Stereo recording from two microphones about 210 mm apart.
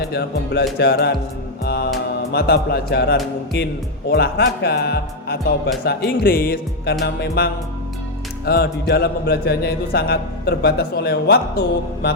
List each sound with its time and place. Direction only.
0.1 s speech: 50° left (ahead or behind)
1.6 s music: 50° left (ahead or behind)
2.3 s speech: 50° left (ahead or behind)